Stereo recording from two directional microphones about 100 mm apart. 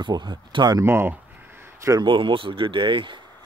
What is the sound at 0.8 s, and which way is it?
Speech, 25° right (ahead or behind).